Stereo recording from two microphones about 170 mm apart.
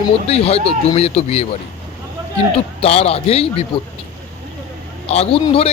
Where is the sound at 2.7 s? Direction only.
35° left (ahead or behind).